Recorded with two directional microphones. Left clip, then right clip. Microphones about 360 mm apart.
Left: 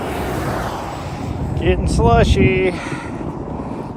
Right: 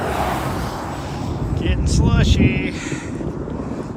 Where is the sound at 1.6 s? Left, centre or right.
Centre.